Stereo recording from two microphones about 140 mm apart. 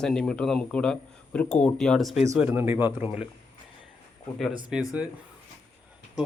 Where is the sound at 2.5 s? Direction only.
15° right (ahead or behind).